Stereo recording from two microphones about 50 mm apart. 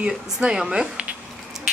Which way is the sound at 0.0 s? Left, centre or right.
Centre.